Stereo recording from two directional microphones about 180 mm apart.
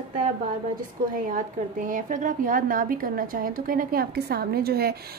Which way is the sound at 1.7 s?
45° right (ahead or behind).